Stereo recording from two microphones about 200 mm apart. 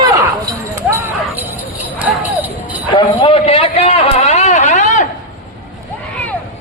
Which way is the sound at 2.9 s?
25° left (ahead or behind).